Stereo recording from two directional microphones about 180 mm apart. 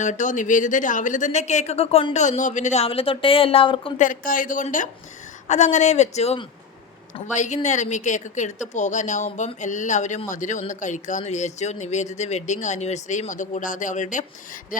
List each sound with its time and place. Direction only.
0.0 s speech: 45° left (ahead or behind)
3.9 s a woman's voice: 45° left (ahead or behind)